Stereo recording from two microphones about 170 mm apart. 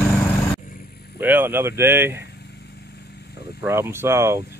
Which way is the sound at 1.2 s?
10° right (ahead or behind).